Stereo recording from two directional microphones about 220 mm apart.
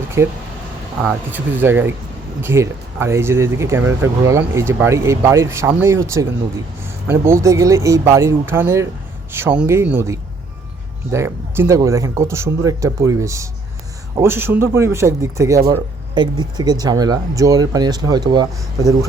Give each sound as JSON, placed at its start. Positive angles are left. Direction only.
{"t": 0.2, "sound": "speech", "side_deg": -10}